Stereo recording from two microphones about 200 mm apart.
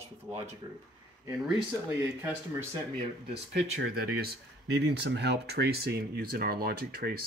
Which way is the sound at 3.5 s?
80° right.